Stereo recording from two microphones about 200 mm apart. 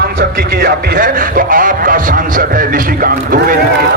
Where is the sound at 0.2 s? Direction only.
50° right (ahead or behind).